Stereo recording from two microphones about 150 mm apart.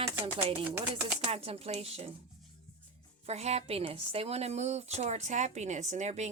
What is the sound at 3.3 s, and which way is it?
A woman's voice, 45° right (ahead or behind).